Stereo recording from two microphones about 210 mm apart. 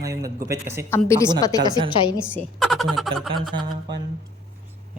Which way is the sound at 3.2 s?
Centre (ahead or behind).